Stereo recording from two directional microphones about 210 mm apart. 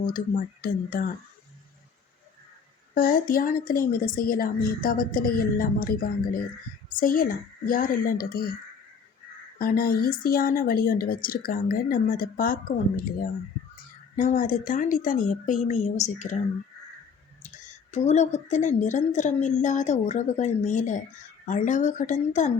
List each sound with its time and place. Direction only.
0.0 s speech: 40° left (ahead or behind)
2.9 s a woman's voice: 45° left (ahead or behind)
9.6 s a woman's voice: 45° left (ahead or behind)
17.4 s speech: 35° left (ahead or behind)